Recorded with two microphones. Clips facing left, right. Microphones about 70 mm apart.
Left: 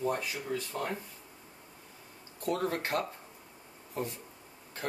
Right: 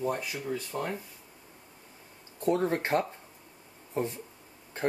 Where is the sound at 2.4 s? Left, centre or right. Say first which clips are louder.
Right 5 dB; right.